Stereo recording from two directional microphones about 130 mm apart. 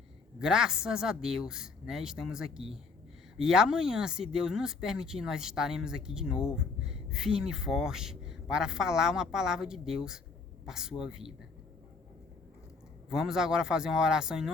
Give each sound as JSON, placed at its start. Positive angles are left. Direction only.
{"t": 0.3, "sound": "speech", "side_deg": -5}
{"t": 13.1, "sound": "speech", "side_deg": -5}